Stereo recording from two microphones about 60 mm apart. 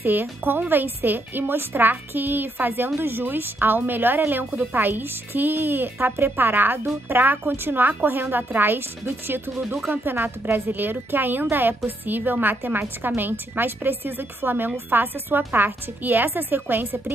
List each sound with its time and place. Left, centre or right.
0.0 s a woman's voice: right